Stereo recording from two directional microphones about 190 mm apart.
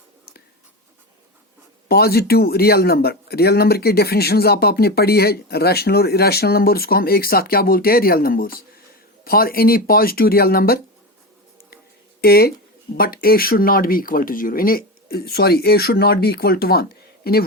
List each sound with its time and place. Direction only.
1.9 s speech: 55° left (ahead or behind)
12.2 s speech: 55° left (ahead or behind)